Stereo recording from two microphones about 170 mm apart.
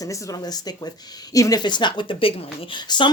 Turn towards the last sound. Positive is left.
turn(degrees=25)  # may be behind; listen again after turning